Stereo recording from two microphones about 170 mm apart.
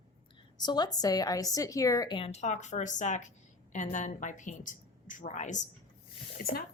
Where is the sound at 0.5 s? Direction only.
25° left (ahead or behind); by 5.6 s 45° left (ahead or behind).